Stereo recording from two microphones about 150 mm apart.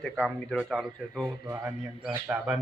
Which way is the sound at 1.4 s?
15° right (ahead or behind).